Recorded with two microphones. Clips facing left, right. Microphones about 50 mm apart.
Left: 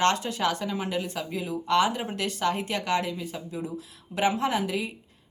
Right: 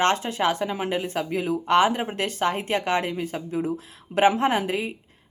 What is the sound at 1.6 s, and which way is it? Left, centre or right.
Speech, right.